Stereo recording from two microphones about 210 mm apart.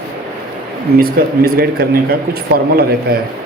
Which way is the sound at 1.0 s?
45° right (ahead or behind).